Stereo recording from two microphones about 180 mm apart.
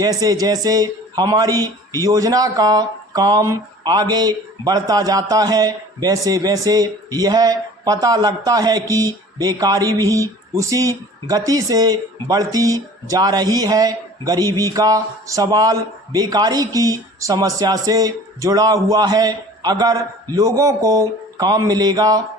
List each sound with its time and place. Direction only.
0.0 s speech: 20° right (ahead or behind)